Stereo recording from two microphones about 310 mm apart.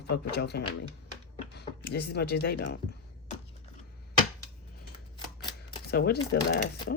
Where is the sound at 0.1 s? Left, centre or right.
Left.